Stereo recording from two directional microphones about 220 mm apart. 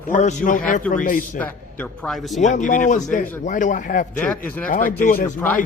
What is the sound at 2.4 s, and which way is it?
A man's voice, 35° left (ahead or behind).